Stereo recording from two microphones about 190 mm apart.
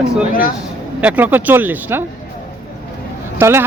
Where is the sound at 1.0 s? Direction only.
10° right (ahead or behind).